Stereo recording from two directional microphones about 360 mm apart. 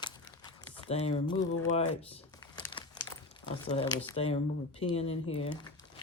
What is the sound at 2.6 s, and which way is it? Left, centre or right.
Crumpling, centre.